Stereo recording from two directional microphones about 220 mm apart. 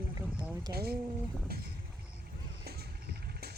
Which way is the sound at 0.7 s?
45° right (ahead or behind).